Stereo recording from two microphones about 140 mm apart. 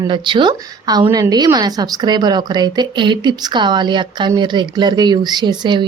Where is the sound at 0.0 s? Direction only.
35° right (ahead or behind).